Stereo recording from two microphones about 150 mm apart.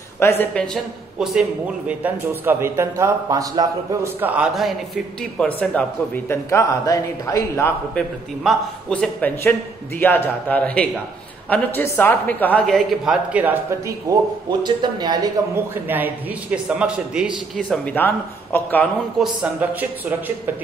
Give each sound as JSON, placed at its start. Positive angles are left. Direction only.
{"t": 0.2, "sound": "a woman's voice", "side_deg": 15}
{"t": 0.6, "sound": "a man's voice", "side_deg": 0}
{"t": 1.9, "sound": "a woman's voice", "side_deg": -10}
{"t": 8.5, "sound": "a woman's voice", "side_deg": 5}
{"t": 14.6, "sound": "speech", "side_deg": -30}
{"t": 15.5, "sound": "a man's voice", "side_deg": -15}
{"t": 17.8, "sound": "a woman's voice", "side_deg": 10}
{"t": 19.1, "sound": "speech", "side_deg": -5}